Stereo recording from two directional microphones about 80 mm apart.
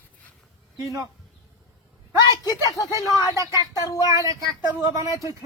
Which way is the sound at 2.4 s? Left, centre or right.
Left.